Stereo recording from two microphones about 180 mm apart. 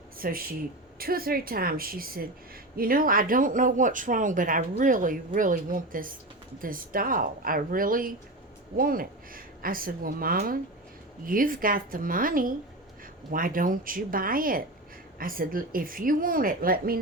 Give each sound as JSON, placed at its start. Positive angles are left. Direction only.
{"t": 0.2, "sound": "a woman's voice", "side_deg": -55}